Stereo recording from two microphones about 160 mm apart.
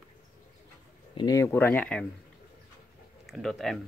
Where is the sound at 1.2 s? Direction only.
20° left (ahead or behind).